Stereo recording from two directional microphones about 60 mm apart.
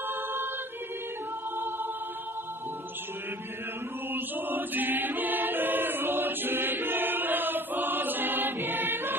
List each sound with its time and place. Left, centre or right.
0.1 s a capella: right
4.1 s choir: right